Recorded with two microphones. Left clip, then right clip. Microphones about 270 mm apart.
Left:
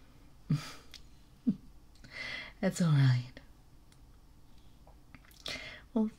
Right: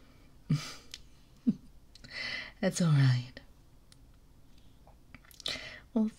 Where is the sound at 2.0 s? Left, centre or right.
Centre.